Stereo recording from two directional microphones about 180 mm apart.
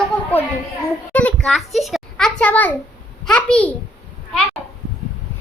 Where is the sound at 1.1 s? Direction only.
5° left (ahead or behind).